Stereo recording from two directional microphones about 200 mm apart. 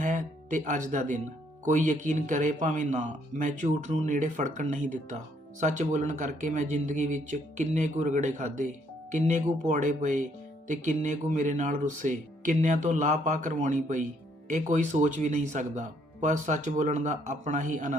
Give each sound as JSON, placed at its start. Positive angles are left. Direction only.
{"t": 0.0, "sound": "speech", "side_deg": -40}